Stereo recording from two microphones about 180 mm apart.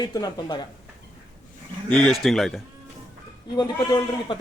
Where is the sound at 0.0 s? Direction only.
20° left (ahead or behind).